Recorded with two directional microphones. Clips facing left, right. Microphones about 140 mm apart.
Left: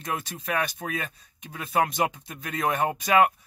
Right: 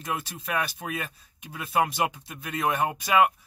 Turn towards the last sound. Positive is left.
turn(degrees=0)  # may be behind; listen again after turning